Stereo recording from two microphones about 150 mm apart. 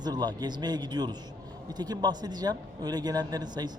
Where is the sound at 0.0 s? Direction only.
30° right (ahead or behind).